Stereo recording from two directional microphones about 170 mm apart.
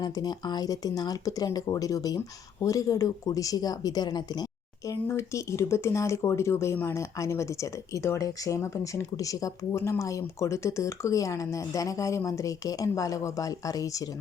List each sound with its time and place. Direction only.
0.0 s speech: 25° left (ahead or behind)